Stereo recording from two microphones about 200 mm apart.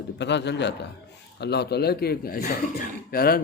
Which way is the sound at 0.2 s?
60° left (ahead or behind).